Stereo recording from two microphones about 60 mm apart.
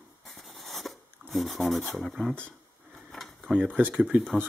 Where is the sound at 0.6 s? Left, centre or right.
Centre.